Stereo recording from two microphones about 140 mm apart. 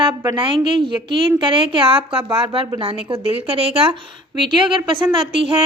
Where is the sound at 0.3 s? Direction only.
35° right (ahead or behind).